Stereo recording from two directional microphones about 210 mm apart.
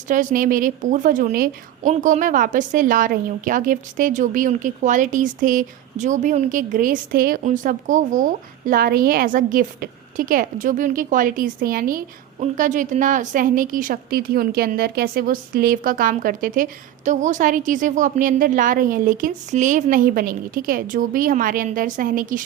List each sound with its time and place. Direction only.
0.1 s a woman's voice: 40° right (ahead or behind)